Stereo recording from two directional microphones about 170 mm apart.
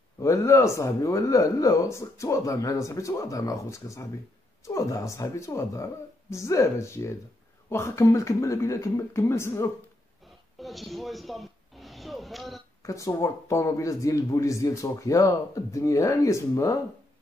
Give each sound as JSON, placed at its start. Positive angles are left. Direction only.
{"t": 0.2, "sound": "speech", "side_deg": 20}
{"t": 10.6, "sound": "a sound", "side_deg": 0}
{"t": 12.8, "sound": "speech", "side_deg": 20}